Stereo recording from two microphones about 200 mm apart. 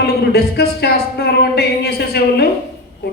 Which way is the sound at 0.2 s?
55° left (ahead or behind).